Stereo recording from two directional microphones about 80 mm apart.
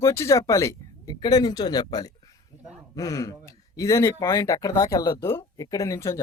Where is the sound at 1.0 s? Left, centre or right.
Left.